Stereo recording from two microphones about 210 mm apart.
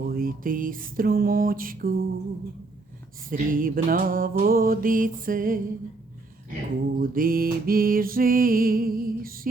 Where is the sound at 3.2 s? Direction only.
40° right (ahead or behind).